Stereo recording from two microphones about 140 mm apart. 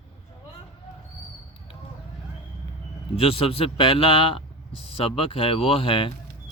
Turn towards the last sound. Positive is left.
turn(degrees=40)  # may be behind; listen again after turning